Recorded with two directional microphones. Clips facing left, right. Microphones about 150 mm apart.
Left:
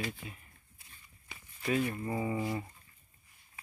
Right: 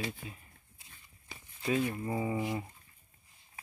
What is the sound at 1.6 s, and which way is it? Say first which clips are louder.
Speech: even; 15° right (ahead or behind).